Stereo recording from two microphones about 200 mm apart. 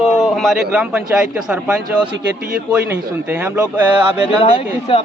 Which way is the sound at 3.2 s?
10° right (ahead or behind).